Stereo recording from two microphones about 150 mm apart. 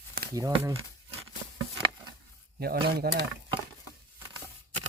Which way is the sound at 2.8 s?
90° right.